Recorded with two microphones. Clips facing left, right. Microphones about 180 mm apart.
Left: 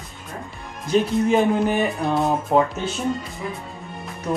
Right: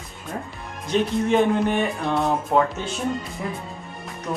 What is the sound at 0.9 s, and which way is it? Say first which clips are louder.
Speech: left 2 dB; centre (ahead or behind).